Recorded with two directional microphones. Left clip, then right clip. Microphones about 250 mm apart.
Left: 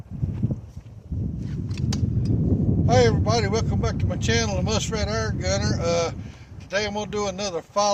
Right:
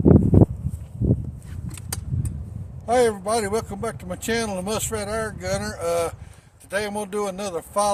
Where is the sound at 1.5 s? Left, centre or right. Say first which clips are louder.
Left 3 dB; centre.